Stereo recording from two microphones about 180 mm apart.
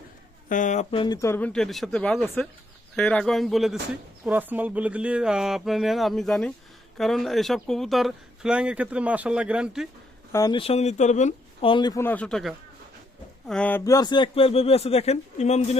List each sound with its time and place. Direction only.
0.4 s speech: 45° left (ahead or behind); by 9.9 s 5° right (ahead or behind)
10.3 s speech: 20° left (ahead or behind)
10.6 s speech: 35° left (ahead or behind)
11.7 s speech: 25° left (ahead or behind)
12.0 s speech: 5° left (ahead or behind); by 15.8 s 40° left (ahead or behind)